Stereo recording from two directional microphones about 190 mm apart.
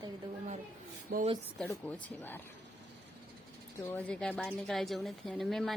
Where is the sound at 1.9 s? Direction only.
10° left (ahead or behind).